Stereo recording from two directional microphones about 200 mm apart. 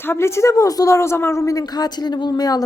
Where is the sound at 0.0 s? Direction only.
10° left (ahead or behind).